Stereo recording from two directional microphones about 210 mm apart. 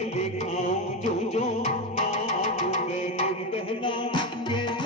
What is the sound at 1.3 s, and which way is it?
Music, 30° left (ahead or behind).